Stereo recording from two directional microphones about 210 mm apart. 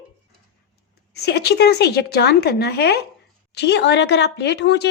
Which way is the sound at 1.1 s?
50° left (ahead or behind).